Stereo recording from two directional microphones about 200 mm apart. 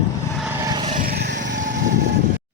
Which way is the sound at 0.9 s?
50° right (ahead or behind).